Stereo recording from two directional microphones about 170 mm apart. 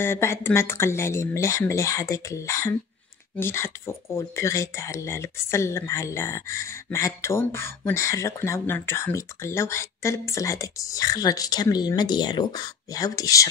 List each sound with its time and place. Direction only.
0.0 s speech: 15° left (ahead or behind)